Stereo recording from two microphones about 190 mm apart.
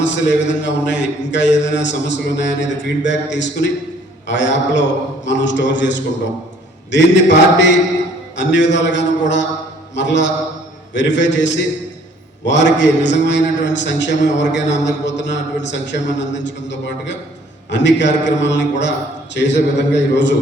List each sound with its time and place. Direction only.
0.0 s a man's voice: 70° left (ahead or behind)